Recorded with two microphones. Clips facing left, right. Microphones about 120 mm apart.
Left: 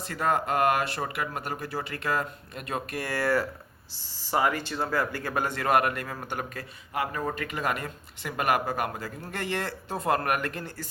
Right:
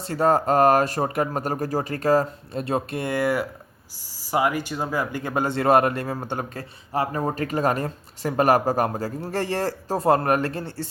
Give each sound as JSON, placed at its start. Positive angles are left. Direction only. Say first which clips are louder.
{"t": 0.0, "sound": "a man's voice", "louder": "right 7 dB", "side_deg": -35}